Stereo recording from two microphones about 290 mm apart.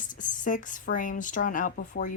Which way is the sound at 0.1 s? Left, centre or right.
Left.